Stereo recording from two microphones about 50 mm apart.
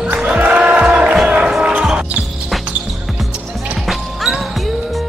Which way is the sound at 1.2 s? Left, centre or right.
Right.